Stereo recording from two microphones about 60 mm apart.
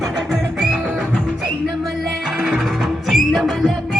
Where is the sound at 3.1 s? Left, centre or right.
Centre.